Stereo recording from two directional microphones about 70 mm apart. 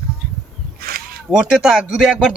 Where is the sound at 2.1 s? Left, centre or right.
Centre.